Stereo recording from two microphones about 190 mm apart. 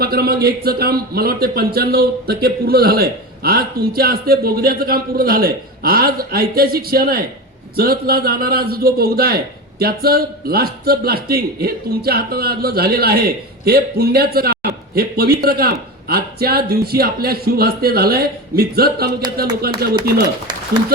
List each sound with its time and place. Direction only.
0.0 s a man's voice: 55° right (ahead or behind)